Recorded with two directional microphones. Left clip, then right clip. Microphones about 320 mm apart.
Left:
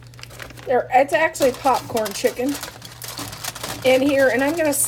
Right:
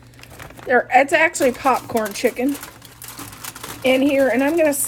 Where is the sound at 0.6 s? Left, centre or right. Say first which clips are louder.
Right 2 dB; right.